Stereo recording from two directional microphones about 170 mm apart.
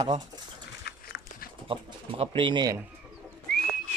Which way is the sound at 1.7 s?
30° right (ahead or behind).